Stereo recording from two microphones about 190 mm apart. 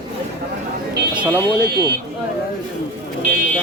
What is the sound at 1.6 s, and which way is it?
Speech, 55° right (ahead or behind).